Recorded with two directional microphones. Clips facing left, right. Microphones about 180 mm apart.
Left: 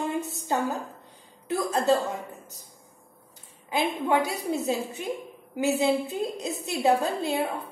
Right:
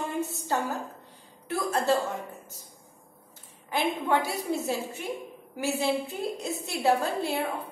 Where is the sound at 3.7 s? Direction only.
15° left (ahead or behind).